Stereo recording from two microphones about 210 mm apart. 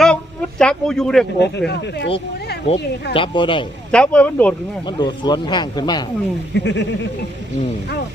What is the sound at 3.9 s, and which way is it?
Speech, 5° left (ahead or behind).